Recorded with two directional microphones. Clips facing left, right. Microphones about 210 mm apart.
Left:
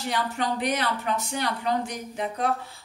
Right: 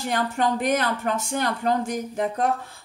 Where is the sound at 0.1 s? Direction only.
50° right (ahead or behind).